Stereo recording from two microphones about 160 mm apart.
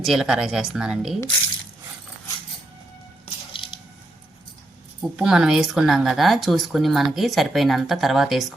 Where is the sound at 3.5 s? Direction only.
35° left (ahead or behind).